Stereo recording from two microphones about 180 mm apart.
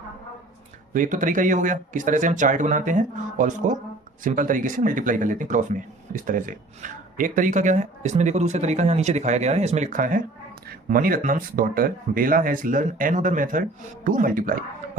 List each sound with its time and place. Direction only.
0.9 s speech: 45° right (ahead or behind)